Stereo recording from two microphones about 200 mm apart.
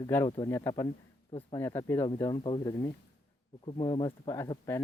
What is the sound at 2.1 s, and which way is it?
Speech, 25° left (ahead or behind).